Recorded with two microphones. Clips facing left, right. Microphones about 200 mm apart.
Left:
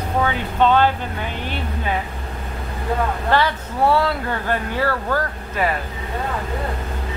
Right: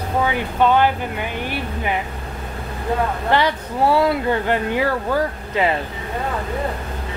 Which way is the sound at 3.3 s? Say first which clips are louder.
Even; 20° right (ahead or behind).